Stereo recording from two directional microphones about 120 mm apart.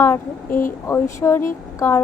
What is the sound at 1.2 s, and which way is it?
Speech, 20° left (ahead or behind).